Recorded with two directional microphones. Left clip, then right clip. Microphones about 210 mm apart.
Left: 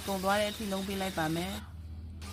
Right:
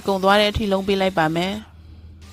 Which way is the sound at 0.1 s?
45° right (ahead or behind).